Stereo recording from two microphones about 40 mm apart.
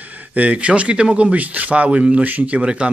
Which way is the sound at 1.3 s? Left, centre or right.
Right.